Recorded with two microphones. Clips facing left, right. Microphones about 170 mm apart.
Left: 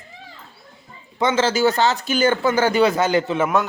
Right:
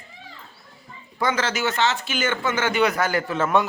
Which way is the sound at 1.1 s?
25° left (ahead or behind).